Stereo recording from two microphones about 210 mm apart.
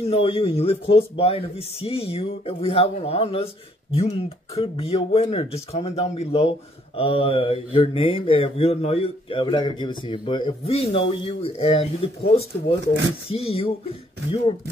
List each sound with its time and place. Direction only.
0.0 s speech: 25° left (ahead or behind)